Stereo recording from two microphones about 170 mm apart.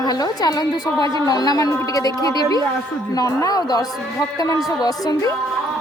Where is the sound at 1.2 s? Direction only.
20° left (ahead or behind).